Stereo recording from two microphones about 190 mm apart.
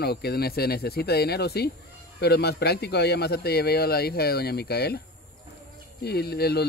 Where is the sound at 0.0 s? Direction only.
55° left (ahead or behind).